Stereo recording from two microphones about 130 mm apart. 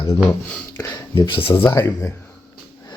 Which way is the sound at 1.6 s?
20° left (ahead or behind).